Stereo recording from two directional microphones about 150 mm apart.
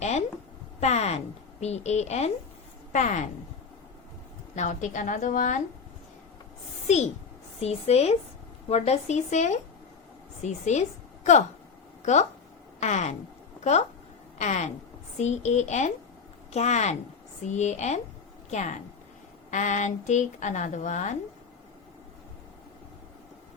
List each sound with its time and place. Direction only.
0.0 s a sound: 50° left (ahead or behind)
0.8 s a woman's voice: 45° left (ahead or behind)
4.5 s a woman's voice: 55° left (ahead or behind)
6.8 s a woman's voice: 50° left (ahead or behind)
12.8 s a woman's voice: 50° left (ahead or behind)
14.3 s a woman's voice: 50° left (ahead or behind)